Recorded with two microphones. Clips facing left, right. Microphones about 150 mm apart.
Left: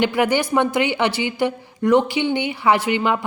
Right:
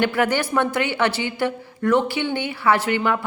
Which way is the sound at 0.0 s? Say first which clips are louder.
Left 2 dB; 15° left (ahead or behind).